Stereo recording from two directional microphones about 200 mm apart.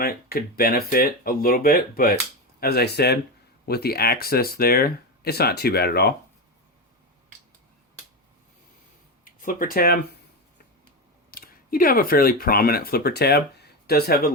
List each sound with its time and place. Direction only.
0.0 s speech: 50° left (ahead or behind)
9.2 s speech: 45° left (ahead or behind)
11.3 s speech: 45° left (ahead or behind)